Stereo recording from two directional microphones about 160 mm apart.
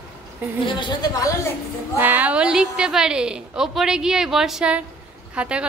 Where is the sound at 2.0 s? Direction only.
10° right (ahead or behind).